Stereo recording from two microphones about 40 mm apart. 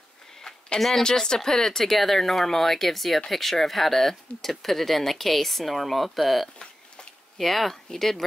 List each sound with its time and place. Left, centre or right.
0.7 s speech: centre
1.0 s speech: centre